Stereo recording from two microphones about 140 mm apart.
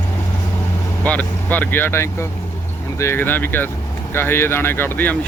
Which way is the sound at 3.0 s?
15° left (ahead or behind).